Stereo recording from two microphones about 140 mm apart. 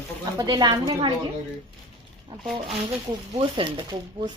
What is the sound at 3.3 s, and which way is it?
Speech, 35° right (ahead or behind).